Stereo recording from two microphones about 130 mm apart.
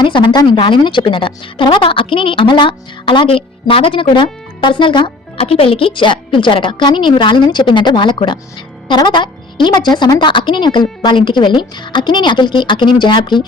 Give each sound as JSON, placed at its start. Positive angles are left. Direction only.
{"t": 0.0, "sound": "a woman's voice", "side_deg": 35}